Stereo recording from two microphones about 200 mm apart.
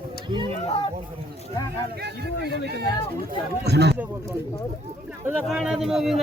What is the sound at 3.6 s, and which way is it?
Speech, 55° right (ahead or behind).